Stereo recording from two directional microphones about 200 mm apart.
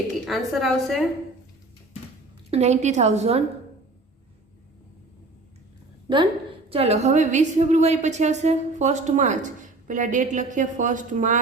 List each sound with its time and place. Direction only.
0.3 s a woman's voice: centre (ahead or behind)
2.5 s a woman's voice: 35° right (ahead or behind)
6.7 s a woman's voice: 30° right (ahead or behind)